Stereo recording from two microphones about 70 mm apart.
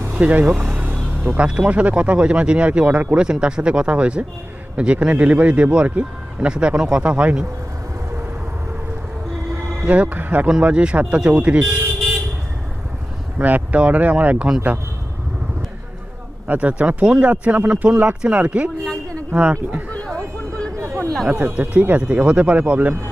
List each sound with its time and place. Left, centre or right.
0.0 s speech: right
0.8 s a sound: right
1.5 s speech: centre
9.8 s speech: centre
13.4 s speech: right
16.5 s speech: centre
19.9 s a sound: centre
20.7 s a sound: right
21.2 s speech: centre